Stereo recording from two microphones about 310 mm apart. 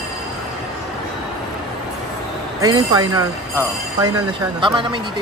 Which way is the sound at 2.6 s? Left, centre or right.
Centre.